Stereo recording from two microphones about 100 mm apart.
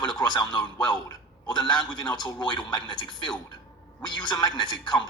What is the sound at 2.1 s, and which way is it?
Speech, 45° left (ahead or behind).